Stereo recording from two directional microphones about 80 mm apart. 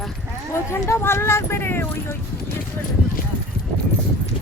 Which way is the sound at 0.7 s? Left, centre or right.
Left.